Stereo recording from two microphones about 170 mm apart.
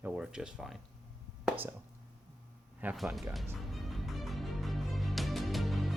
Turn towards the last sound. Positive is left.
turn(degrees=0)  # may be behind; listen again after turning